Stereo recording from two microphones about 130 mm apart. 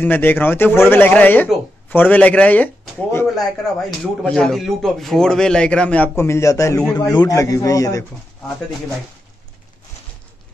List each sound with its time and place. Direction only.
0.0 s speech: 15° left (ahead or behind)
3.3 s a man's voice: 5° left (ahead or behind); by 8.0 s 25° left (ahead or behind)